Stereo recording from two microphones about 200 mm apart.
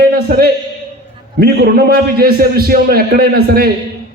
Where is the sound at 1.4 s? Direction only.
50° right (ahead or behind).